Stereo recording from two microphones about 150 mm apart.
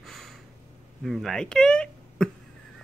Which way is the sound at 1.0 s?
Centre (ahead or behind).